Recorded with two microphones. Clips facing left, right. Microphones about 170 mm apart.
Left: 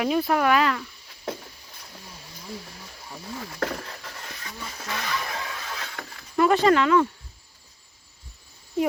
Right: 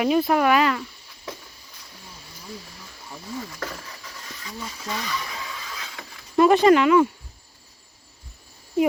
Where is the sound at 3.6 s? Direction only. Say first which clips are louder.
Left 5 dB; 55° left (ahead or behind).